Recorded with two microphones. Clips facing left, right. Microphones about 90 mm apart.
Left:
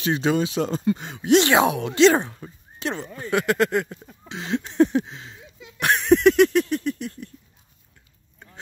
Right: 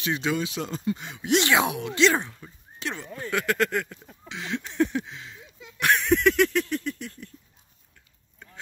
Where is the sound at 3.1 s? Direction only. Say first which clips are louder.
Left 4 dB; 20° left (ahead or behind).